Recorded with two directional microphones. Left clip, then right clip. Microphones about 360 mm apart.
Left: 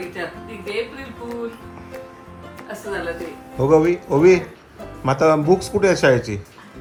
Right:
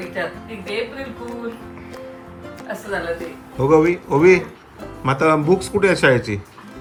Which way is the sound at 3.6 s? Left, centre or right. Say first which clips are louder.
Right 1 dB; centre.